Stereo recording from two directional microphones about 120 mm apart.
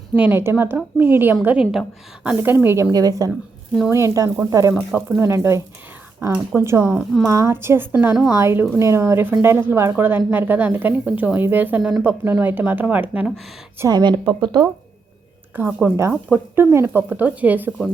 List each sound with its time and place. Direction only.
0.2 s a woman's voice: 20° right (ahead or behind)
2.9 s a woman's voice: 30° right (ahead or behind)
7.9 s a woman's voice: 5° right (ahead or behind)
8.4 s a woman's voice: 20° right (ahead or behind)
11.8 s a woman's voice: 5° right (ahead or behind)
12.0 s a woman's voice: 15° right (ahead or behind)
13.9 s speech: 40° right (ahead or behind)
15.5 s a woman's voice: 15° right (ahead or behind)